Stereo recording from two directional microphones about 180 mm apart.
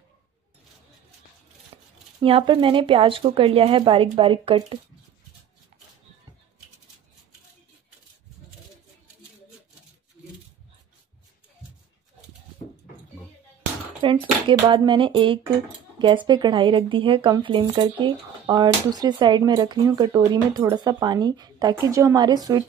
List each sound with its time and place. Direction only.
1.7 s scissors: 30° right (ahead or behind)
2.2 s speech: 30° right (ahead or behind)
14.0 s speech: 25° right (ahead or behind)